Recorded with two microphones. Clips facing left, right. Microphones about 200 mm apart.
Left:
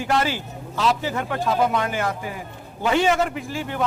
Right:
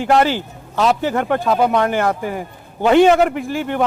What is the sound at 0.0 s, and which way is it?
Speech, 60° right (ahead or behind).